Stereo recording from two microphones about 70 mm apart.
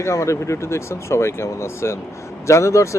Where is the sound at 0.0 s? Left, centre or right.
Left.